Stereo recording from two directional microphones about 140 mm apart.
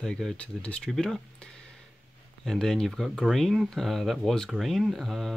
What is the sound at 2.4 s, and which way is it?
Speech, 5° left (ahead or behind).